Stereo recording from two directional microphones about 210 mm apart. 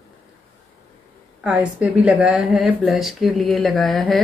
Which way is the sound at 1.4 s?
5° right (ahead or behind).